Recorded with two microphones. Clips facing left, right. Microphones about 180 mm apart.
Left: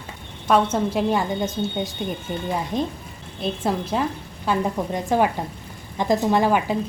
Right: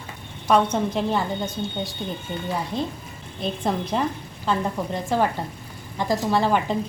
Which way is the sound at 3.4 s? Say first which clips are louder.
Left 1 dB; 5° left (ahead or behind).